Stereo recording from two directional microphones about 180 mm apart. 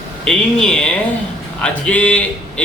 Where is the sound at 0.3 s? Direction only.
5° left (ahead or behind).